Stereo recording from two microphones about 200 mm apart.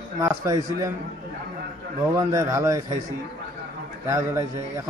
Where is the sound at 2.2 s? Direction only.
15° right (ahead or behind).